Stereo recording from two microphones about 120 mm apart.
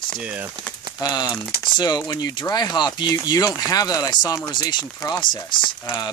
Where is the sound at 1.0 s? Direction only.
35° left (ahead or behind).